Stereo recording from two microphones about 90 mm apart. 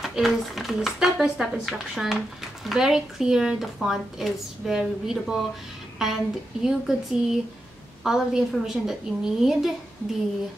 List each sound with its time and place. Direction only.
0.0 s speech: centre (ahead or behind)